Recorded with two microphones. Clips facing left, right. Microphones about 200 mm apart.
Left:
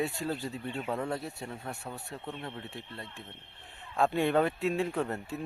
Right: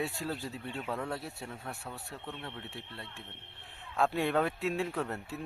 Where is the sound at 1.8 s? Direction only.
15° left (ahead or behind).